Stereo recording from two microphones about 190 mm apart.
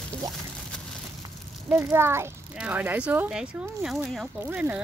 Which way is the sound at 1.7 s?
15° right (ahead or behind).